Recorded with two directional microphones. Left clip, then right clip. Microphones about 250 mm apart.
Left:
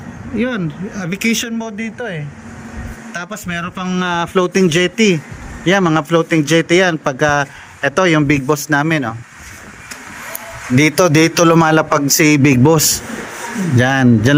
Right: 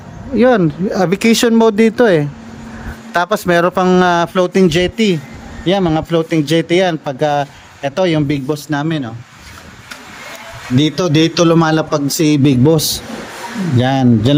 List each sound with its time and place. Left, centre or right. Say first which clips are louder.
0.3 s a man's voice: right 9 dB; centre
10.8 s a man's voice: left 2 dB; centre
13.7 s a man's voice: left 1 dB; centre